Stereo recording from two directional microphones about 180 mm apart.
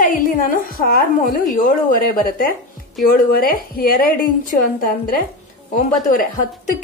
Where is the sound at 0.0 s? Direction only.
50° left (ahead or behind).